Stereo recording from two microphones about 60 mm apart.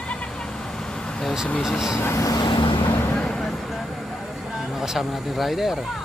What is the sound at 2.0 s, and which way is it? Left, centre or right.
Speech, left.